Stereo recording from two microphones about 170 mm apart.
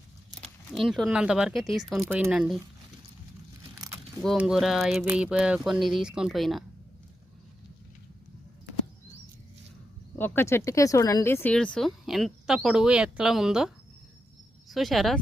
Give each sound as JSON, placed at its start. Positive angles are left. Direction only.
{"t": 0.4, "sound": "speech", "side_deg": 0}
{"t": 3.8, "sound": "a sound", "side_deg": -15}
{"t": 4.2, "sound": "speech", "side_deg": 0}
{"t": 10.2, "sound": "speech", "side_deg": 15}